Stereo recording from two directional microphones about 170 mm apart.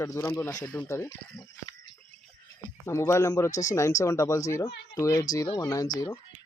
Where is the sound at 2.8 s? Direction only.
15° left (ahead or behind).